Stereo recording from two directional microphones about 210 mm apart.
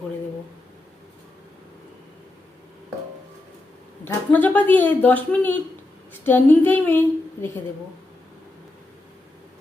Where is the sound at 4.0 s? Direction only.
10° left (ahead or behind).